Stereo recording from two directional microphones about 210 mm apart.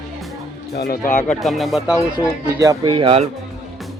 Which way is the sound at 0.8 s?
45° left (ahead or behind).